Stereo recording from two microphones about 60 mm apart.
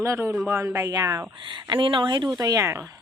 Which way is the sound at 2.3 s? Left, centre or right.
Right.